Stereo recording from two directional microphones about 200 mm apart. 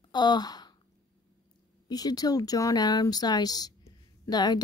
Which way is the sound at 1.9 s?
20° left (ahead or behind).